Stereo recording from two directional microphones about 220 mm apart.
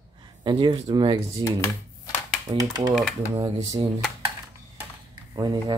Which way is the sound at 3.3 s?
25° right (ahead or behind).